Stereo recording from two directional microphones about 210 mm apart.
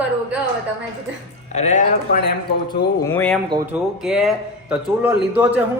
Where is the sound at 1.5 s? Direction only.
35° left (ahead or behind).